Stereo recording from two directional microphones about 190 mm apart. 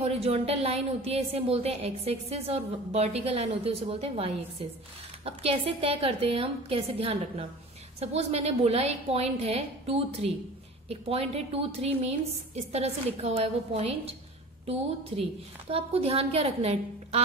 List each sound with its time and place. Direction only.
0.0 s speech: 35° right (ahead or behind)
15.7 s speech: 30° right (ahead or behind)